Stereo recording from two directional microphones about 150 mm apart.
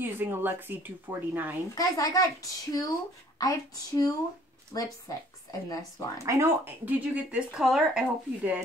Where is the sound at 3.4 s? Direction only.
25° left (ahead or behind).